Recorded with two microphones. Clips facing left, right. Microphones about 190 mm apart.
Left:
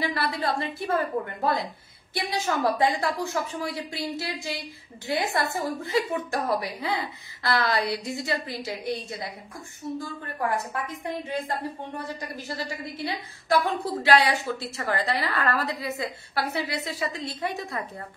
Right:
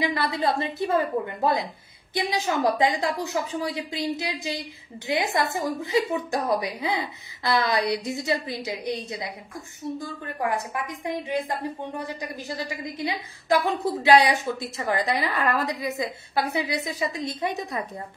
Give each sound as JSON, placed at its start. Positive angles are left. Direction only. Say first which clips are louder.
{"t": 0.0, "sound": "a woman's voice", "louder": "right 3 dB", "side_deg": -20}
{"t": 10.2, "sound": "a woman's voice", "louder": "right 1 dB", "side_deg": -15}